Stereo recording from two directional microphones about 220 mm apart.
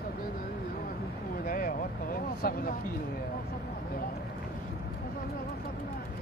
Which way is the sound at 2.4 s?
40° left (ahead or behind).